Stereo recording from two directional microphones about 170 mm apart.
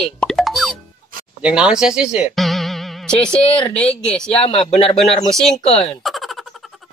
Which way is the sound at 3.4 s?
30° left (ahead or behind).